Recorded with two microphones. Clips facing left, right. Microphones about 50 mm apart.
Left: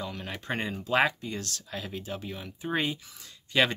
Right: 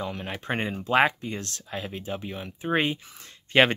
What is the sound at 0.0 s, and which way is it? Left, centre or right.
Speech, right.